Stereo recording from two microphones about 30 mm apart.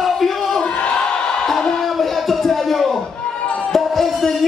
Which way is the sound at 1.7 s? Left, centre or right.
Centre.